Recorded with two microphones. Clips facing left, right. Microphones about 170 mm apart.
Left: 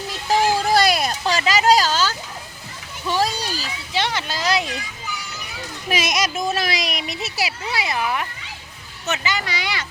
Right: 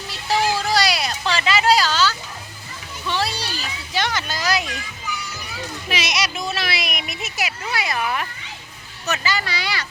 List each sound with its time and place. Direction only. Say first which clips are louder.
0.3 s a sound: left 2 dB; 50° left (ahead or behind)
3.9 s speech: left 1 dB; 25° left (ahead or behind)
5.9 s a child's voice: left 4 dB; 45° left (ahead or behind); by 9.8 s 20° left (ahead or behind)